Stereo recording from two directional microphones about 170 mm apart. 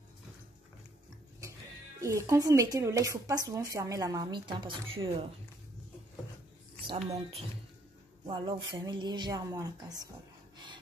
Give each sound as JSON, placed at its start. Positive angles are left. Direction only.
{"t": 2.0, "sound": "speech", "side_deg": -20}
{"t": 6.9, "sound": "speech", "side_deg": -35}
{"t": 8.3, "sound": "speech", "side_deg": -25}